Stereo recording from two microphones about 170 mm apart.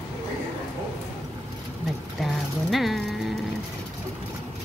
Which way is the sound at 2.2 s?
Centre (ahead or behind).